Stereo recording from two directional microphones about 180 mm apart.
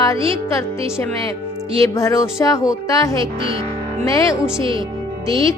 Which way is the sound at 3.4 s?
30° right (ahead or behind).